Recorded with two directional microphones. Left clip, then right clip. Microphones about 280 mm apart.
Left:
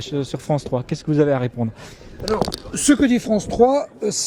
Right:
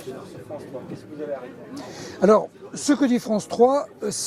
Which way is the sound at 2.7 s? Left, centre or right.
Centre.